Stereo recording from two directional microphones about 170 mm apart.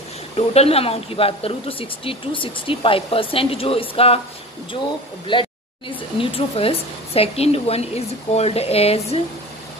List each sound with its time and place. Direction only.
0.4 s speech: 35° left (ahead or behind)
5.2 s speech: 30° left (ahead or behind)